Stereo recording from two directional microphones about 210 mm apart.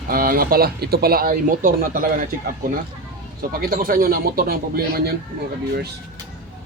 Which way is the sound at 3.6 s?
45° right (ahead or behind).